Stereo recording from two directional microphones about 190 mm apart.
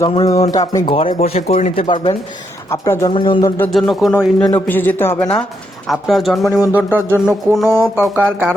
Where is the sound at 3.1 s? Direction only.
25° left (ahead or behind).